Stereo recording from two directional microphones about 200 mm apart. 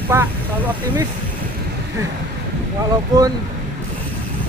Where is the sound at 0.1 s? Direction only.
15° right (ahead or behind).